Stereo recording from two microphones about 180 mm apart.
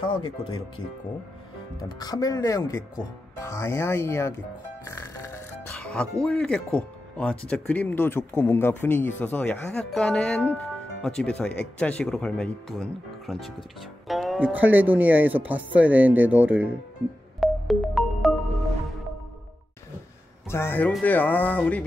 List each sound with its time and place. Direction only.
0.0 s speech: 25° left (ahead or behind)
4.8 s music: 15° left (ahead or behind)
5.7 s speech: 5° left (ahead or behind)
17.4 s music: centre (ahead or behind)
20.4 s speech: 15° left (ahead or behind)